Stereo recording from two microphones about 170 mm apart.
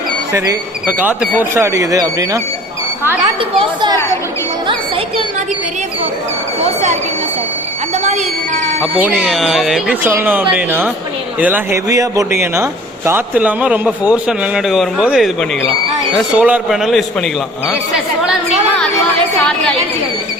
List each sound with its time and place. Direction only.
0.3 s a man's voice: 15° right (ahead or behind)
3.6 s speech: 25° right (ahead or behind)
7.9 s speech: 40° right (ahead or behind)
9.0 s a man's voice: 10° right (ahead or behind)
11.9 s a man's voice: 20° right (ahead or behind); by 17.2 s centre (ahead or behind)